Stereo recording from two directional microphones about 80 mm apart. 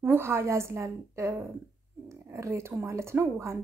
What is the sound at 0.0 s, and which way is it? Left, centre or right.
Speech, right.